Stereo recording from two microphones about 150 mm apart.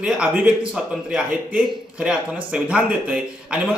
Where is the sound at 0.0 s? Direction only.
5° right (ahead or behind).